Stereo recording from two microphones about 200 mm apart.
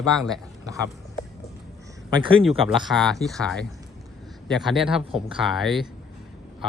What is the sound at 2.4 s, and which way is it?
Speech, centre (ahead or behind).